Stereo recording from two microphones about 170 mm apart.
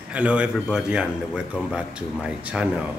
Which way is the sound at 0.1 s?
5° right (ahead or behind).